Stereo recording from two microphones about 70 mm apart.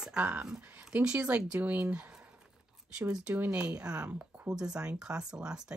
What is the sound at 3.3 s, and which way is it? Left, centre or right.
A woman's voice, right.